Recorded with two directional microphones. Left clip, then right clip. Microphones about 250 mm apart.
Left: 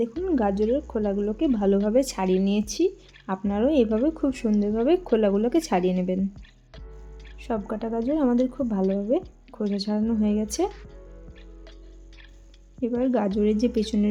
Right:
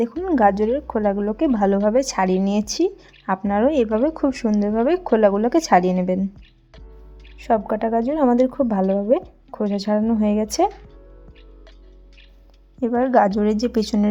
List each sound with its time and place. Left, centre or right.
0.2 s speech: centre
7.3 s speech: centre
12.8 s a woman's voice: right